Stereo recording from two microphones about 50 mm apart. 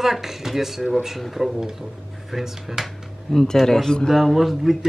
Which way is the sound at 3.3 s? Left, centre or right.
Centre.